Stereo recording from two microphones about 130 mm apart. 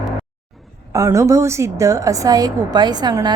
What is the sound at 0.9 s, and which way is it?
A woman's voice, 25° right (ahead or behind).